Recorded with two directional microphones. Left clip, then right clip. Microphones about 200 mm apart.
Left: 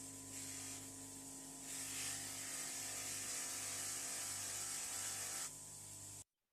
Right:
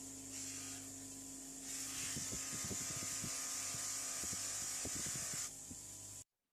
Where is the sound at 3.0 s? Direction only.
15° right (ahead or behind).